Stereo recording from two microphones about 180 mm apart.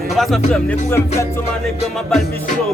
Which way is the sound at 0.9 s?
15° left (ahead or behind).